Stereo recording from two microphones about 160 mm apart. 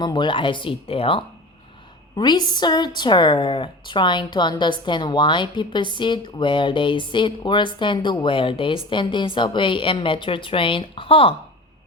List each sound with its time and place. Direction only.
0.0 s a woman's voice: 30° left (ahead or behind)